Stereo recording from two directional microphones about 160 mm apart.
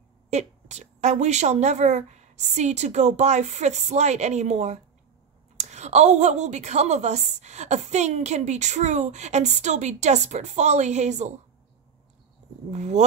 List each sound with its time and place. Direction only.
0.3 s a woman's voice: 45° right (ahead or behind)
12.7 s a woman's voice: 45° right (ahead or behind)